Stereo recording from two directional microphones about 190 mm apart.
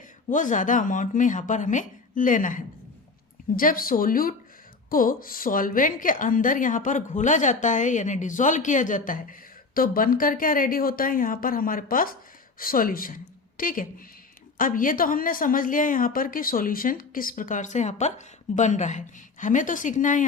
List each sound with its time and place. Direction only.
0.3 s a woman's voice: 45° left (ahead or behind)